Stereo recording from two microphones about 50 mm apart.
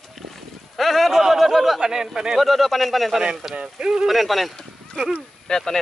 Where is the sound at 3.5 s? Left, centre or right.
Centre.